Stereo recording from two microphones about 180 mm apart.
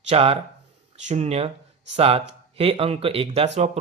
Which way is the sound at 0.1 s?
30° right (ahead or behind).